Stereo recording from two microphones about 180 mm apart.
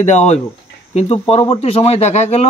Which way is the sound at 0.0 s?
40° left (ahead or behind).